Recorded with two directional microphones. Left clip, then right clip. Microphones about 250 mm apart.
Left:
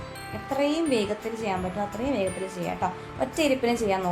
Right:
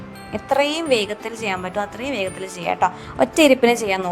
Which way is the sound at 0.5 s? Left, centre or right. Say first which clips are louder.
Right 7 dB; right.